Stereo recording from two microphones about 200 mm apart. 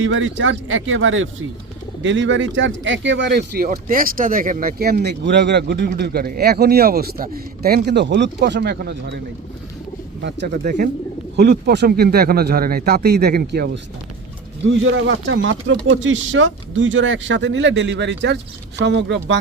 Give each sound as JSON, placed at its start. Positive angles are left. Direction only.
{"t": 0.0, "sound": "a man's voice", "side_deg": -70}
{"t": 10.2, "sound": "a man's voice", "side_deg": -50}
{"t": 11.3, "sound": "a man's voice", "side_deg": -55}
{"t": 14.7, "sound": "speech", "side_deg": -70}